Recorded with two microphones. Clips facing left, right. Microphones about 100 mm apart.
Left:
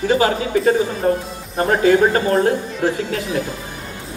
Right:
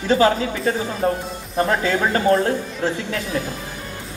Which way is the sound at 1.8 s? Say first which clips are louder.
Left 6 dB; 25° left (ahead or behind).